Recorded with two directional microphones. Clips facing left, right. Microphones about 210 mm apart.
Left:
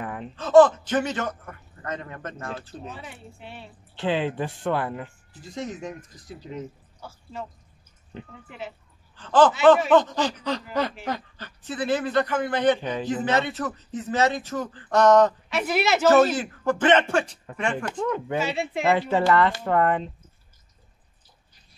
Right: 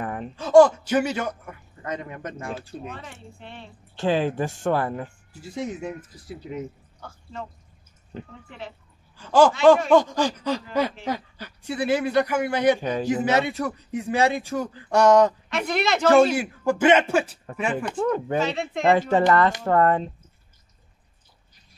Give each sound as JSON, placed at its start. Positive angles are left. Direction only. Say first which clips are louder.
{"t": 0.0, "sound": "a sound", "louder": "right 3 dB", "side_deg": -45}
{"t": 0.4, "sound": "a man's voice", "louder": "right 1 dB", "side_deg": -10}
{"t": 2.9, "sound": "a woman's voice", "louder": "right 1 dB", "side_deg": 5}
{"t": 3.9, "sound": "speech", "louder": "right 3 dB", "side_deg": -45}
{"t": 5.3, "sound": "a man's voice", "louder": "right 2 dB", "side_deg": -10}
{"t": 7.0, "sound": "speech", "louder": "even", "side_deg": 5}
{"t": 8.5, "sound": "a woman's voice", "louder": "left 1 dB", "side_deg": 5}
{"t": 9.1, "sound": "a man's voice", "louder": "right 1 dB", "side_deg": -10}
{"t": 15.5, "sound": "a woman's voice", "louder": "left 1 dB", "side_deg": 5}
{"t": 16.1, "sound": "a man's voice", "louder": "right 2 dB", "side_deg": -10}
{"t": 18.0, "sound": "speech", "louder": "right 3 dB", "side_deg": -40}
{"t": 18.4, "sound": "a woman's voice", "louder": "right 1 dB", "side_deg": 10}
{"t": 18.9, "sound": "speech", "louder": "right 3 dB", "side_deg": -45}